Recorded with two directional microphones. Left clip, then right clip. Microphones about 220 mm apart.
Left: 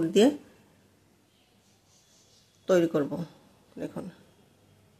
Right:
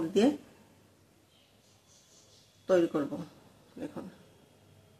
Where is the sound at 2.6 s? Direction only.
40° left (ahead or behind).